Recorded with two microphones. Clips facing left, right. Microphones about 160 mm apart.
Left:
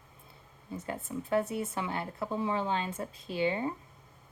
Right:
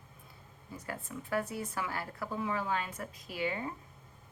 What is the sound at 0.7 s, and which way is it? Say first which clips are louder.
A woman's voice: left 5 dB; 25° left (ahead or behind).